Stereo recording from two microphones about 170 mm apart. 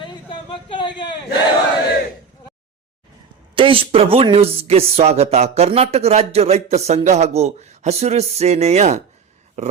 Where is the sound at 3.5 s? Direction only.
30° right (ahead or behind).